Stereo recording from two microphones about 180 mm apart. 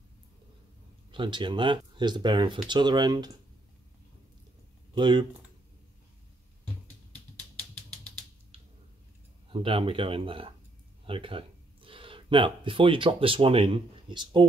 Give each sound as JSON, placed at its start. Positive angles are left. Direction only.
{"t": 1.1, "sound": "speech", "side_deg": -25}
{"t": 4.9, "sound": "speech", "side_deg": -25}
{"t": 9.5, "sound": "speech", "side_deg": -30}